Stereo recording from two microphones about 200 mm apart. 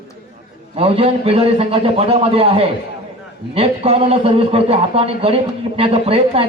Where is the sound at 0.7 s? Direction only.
30° right (ahead or behind).